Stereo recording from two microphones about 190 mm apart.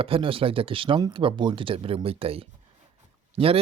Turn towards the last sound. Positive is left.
turn(degrees=-30)  # may be behind; listen again after turning